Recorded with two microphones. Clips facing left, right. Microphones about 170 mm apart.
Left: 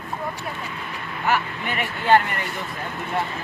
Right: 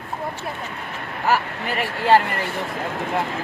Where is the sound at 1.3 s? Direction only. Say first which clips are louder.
Right 2 dB; 35° right (ahead or behind).